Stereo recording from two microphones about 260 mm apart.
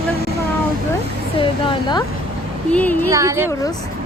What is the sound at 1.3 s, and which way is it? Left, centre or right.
Speech, centre.